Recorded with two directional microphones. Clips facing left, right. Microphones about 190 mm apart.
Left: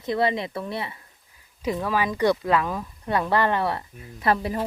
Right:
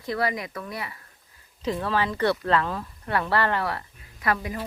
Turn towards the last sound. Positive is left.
turn(degrees=30)  # may be behind; listen again after turning